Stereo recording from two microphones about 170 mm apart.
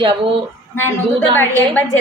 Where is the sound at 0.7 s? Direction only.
15° left (ahead or behind).